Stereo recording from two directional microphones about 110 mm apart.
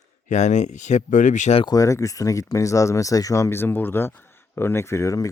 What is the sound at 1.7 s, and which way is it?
Speech, 30° left (ahead or behind).